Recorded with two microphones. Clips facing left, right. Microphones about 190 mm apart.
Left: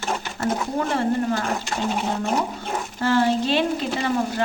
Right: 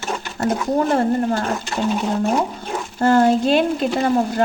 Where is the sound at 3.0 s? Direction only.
50° right (ahead or behind).